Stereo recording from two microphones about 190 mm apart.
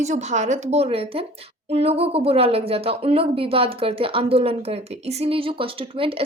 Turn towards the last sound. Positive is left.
turn(degrees=-30)  # may be behind; listen again after turning